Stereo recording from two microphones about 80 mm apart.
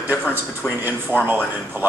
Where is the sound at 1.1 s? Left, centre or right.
Right.